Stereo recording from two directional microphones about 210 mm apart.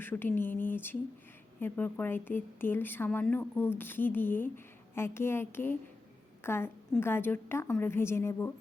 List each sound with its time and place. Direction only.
0.0 s a woman's voice: 10° left (ahead or behind)